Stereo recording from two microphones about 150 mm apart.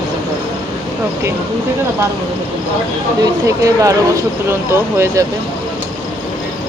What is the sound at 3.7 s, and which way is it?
Speech, 20° right (ahead or behind).